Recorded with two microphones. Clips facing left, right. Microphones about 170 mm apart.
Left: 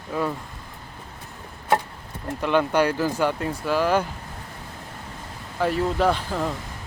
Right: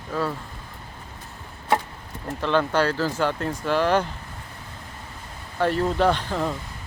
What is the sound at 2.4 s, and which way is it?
Speech, 15° left (ahead or behind).